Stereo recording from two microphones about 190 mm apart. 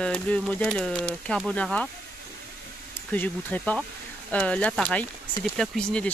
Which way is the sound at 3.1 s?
10° left (ahead or behind).